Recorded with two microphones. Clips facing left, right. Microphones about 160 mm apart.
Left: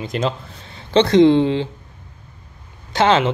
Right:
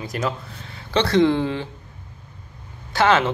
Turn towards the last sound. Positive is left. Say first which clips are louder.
# left 2 dB
turn(degrees=20)  # may be behind; listen again after turning